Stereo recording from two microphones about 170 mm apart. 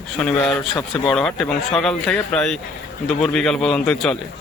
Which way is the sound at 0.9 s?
Centre (ahead or behind).